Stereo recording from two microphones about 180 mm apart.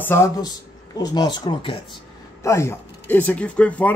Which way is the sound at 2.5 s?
15° left (ahead or behind).